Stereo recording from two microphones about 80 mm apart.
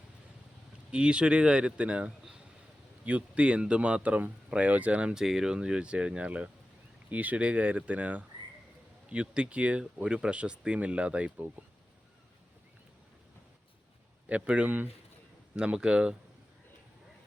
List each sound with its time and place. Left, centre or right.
0.9 s speech: centre
14.3 s speech: centre